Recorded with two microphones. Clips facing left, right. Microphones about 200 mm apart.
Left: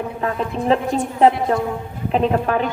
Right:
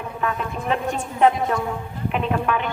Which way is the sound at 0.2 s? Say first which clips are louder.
Left 3 dB; 30° left (ahead or behind).